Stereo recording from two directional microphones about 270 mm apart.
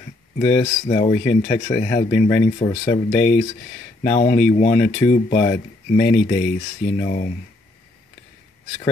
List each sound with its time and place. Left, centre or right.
0.4 s speech: left